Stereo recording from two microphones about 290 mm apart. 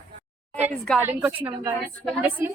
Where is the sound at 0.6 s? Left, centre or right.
Centre.